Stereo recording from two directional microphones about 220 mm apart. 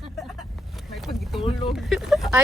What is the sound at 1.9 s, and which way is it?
Speech, centre (ahead or behind).